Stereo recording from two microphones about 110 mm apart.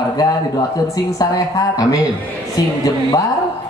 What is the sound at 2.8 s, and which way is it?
Speech, 35° left (ahead or behind).